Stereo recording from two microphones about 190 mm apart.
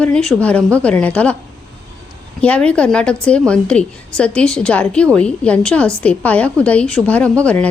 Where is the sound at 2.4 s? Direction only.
5° left (ahead or behind).